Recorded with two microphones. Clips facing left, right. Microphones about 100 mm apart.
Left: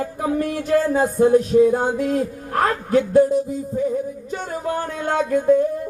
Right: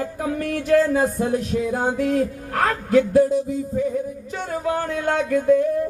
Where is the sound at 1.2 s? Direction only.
40° left (ahead or behind).